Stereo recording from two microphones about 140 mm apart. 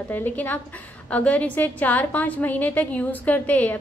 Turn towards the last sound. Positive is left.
turn(degrees=10)  # may be behind; listen again after turning